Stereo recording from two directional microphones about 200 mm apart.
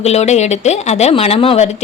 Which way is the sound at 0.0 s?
35° left (ahead or behind).